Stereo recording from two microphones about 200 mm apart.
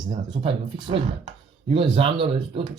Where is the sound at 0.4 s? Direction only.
25° right (ahead or behind).